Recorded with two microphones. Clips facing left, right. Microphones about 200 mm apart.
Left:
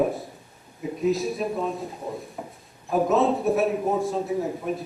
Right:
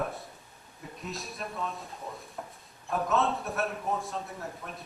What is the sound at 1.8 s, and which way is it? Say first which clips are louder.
Speech: left 9 dB; 30° left (ahead or behind).